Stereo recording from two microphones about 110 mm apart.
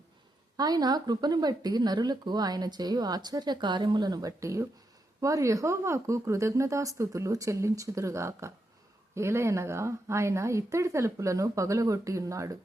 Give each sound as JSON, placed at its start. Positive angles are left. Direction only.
{"t": 0.5, "sound": "speech", "side_deg": -35}